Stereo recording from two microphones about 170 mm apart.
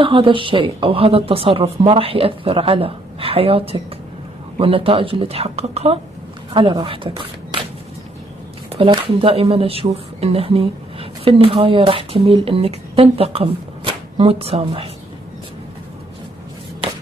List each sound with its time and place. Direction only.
0.0 s speech: 30° right (ahead or behind)
8.6 s speech: 30° right (ahead or behind)